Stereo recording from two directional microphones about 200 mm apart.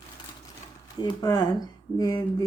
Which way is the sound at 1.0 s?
20° left (ahead or behind).